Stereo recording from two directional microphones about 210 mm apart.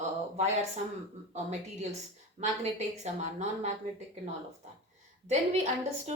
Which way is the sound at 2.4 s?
30° right (ahead or behind).